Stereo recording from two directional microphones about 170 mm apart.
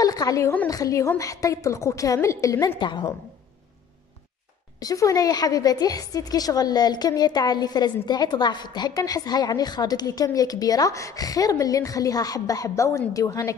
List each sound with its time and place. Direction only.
0.0 s a woman's voice: 20° left (ahead or behind)
4.7 s a woman's voice: 20° left (ahead or behind)